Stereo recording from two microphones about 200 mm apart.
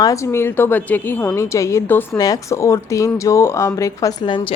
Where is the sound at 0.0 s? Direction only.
15° left (ahead or behind).